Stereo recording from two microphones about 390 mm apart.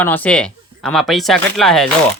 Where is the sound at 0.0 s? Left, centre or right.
Centre.